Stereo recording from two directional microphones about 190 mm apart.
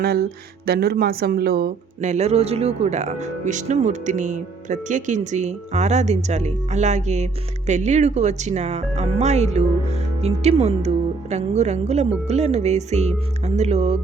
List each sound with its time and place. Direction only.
0.0 s speech: 55° right (ahead or behind)
2.0 s speech: 35° right (ahead or behind)